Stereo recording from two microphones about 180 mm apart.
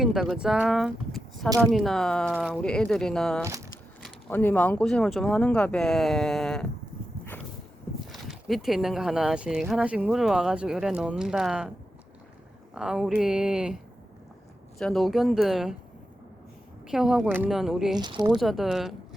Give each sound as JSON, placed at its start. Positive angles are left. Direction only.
{"t": 0.0, "sound": "speech", "side_deg": 0}
{"t": 3.4, "sound": "speech", "side_deg": -15}
{"t": 4.3, "sound": "speech", "side_deg": 10}
{"t": 8.1, "sound": "speech", "side_deg": 0}
{"t": 12.7, "sound": "speech", "side_deg": -5}
{"t": 14.8, "sound": "speech", "side_deg": 0}
{"t": 16.8, "sound": "speech", "side_deg": -5}
{"t": 17.9, "sound": "speech", "side_deg": -25}
{"t": 18.3, "sound": "speech", "side_deg": 0}